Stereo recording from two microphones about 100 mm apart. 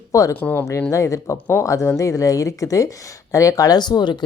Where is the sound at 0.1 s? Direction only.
35° left (ahead or behind).